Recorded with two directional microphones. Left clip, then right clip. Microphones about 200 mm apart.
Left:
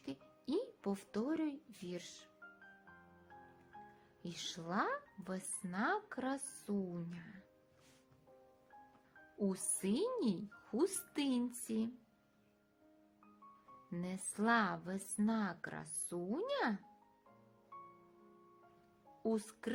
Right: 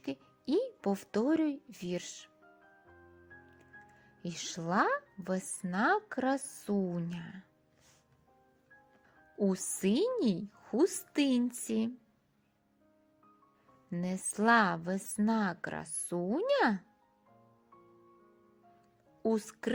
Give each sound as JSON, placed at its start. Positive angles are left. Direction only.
{"t": 0.0, "sound": "music", "side_deg": -30}
{"t": 4.2, "sound": "a woman's voice", "side_deg": -30}
{"t": 9.4, "sound": "a woman's voice", "side_deg": -30}
{"t": 14.0, "sound": "a woman's voice", "side_deg": -30}
{"t": 19.2, "sound": "a woman's voice", "side_deg": -30}